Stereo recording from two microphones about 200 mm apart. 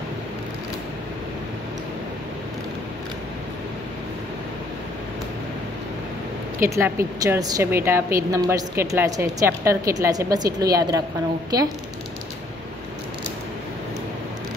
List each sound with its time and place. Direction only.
6.6 s a woman's voice: 15° right (ahead or behind)